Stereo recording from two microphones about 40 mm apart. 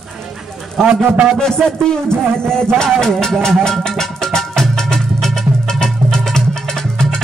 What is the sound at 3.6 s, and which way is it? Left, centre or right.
Music, centre.